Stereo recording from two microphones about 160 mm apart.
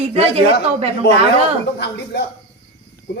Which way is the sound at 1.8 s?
90° left.